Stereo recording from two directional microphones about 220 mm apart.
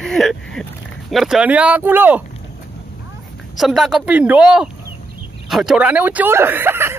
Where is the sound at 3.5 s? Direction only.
Centre (ahead or behind).